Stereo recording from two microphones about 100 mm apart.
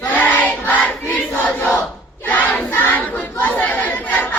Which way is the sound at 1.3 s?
15° left (ahead or behind).